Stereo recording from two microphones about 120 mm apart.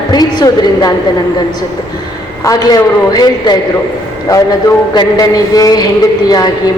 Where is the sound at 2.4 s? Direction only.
30° left (ahead or behind).